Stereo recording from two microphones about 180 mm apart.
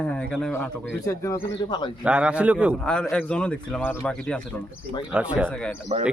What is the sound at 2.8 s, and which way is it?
Speech, 5° left (ahead or behind).